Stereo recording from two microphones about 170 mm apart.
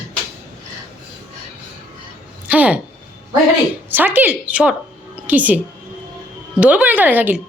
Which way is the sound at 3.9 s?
10° right (ahead or behind).